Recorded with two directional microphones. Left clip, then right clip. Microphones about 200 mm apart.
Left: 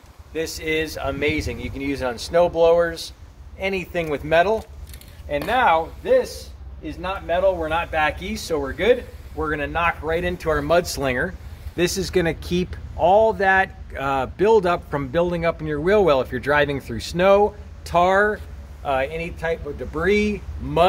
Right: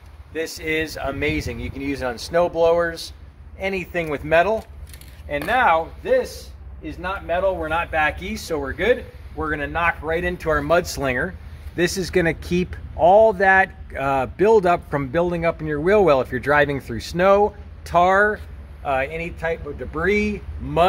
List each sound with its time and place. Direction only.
0.3 s speech: 5° right (ahead or behind)
2.0 s speech: 10° left (ahead or behind)
3.5 s speech: 5° right (ahead or behind)
6.0 s speech: 15° left (ahead or behind)
6.8 s speech: centre (ahead or behind)
10.3 s speech: 5° right (ahead or behind)
11.9 s speech: 15° right (ahead or behind)
17.1 s speech: 10° right (ahead or behind)